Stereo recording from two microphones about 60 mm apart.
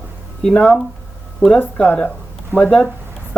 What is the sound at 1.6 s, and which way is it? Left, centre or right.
Speech, left.